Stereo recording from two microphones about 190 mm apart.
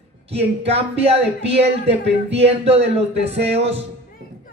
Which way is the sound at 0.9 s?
30° right (ahead or behind).